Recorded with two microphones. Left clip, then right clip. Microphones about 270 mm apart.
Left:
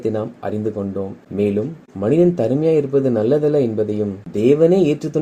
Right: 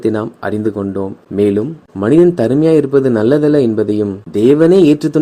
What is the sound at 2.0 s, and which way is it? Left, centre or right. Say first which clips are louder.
Speech: right 6 dB; right.